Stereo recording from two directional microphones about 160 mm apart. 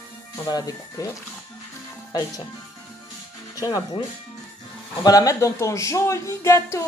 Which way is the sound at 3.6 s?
25° left (ahead or behind).